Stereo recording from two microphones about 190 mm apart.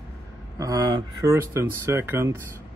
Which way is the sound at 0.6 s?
20° right (ahead or behind).